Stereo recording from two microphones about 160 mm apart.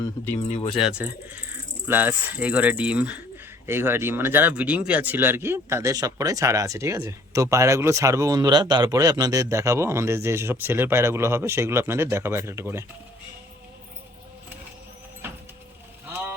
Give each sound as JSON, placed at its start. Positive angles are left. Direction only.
{"t": 0.8, "sound": "speech", "side_deg": -5}
{"t": 15.2, "sound": "a sound", "side_deg": -15}
{"t": 16.0, "sound": "vehicle", "side_deg": -15}